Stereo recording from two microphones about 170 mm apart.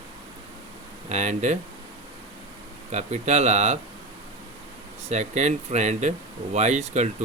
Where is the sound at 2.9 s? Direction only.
40° right (ahead or behind).